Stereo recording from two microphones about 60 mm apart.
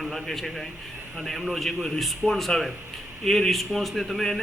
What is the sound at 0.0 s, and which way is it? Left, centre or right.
A man's voice, centre.